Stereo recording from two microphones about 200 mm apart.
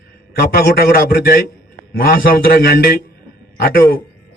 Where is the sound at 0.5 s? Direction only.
50° left (ahead or behind).